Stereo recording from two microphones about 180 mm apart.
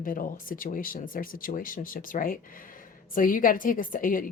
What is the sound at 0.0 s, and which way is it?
A woman's voice, 50° left (ahead or behind).